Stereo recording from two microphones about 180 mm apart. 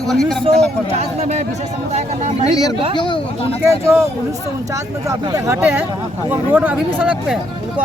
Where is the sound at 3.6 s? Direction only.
15° right (ahead or behind).